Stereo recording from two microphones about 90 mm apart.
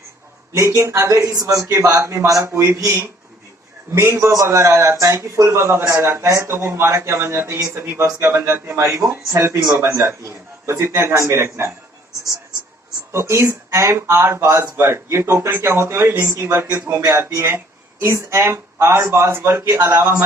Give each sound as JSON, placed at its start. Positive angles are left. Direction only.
{"t": 0.5, "sound": "speech", "side_deg": -35}
{"t": 13.1, "sound": "speech", "side_deg": -30}